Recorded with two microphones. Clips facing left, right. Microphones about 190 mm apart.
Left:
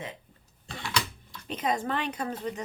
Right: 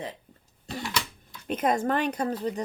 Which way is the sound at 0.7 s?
5° right (ahead or behind).